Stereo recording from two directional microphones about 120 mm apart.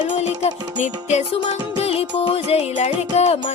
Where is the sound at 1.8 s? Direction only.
55° left (ahead or behind).